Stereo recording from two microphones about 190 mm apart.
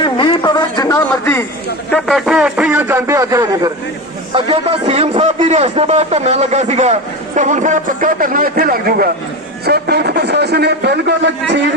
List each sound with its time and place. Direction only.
0.0 s a sound: 25° left (ahead or behind)
1.9 s a man's voice: centre (ahead or behind); by 3.7 s 20° right (ahead or behind)
4.4 s a man's voice: 30° right (ahead or behind); by 11.6 s 65° right (ahead or behind)